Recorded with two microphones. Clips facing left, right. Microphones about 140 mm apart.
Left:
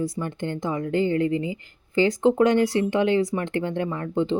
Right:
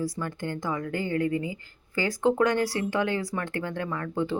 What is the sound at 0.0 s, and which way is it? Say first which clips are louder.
Speech: left 3 dB; 20° left (ahead or behind).